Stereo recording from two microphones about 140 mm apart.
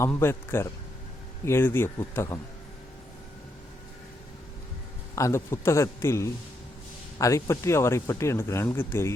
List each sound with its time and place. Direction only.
0.0 s speech: 15° left (ahead or behind)
5.1 s speech: 20° left (ahead or behind)